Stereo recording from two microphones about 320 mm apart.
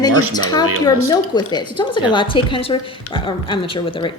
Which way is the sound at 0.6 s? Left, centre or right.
Right.